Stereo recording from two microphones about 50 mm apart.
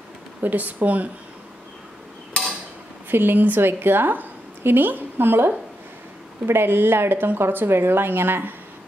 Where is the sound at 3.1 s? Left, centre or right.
Right.